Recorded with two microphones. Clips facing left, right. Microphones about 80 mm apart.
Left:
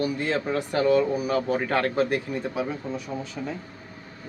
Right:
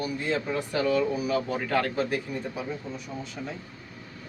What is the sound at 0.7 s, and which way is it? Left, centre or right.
Speech, left.